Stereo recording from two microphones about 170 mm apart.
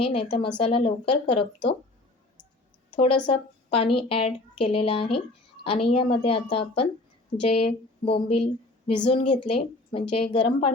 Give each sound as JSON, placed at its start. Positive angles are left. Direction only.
{"t": 0.0, "sound": "a woman's voice", "side_deg": 35}
{"t": 2.9, "sound": "a woman's voice", "side_deg": 30}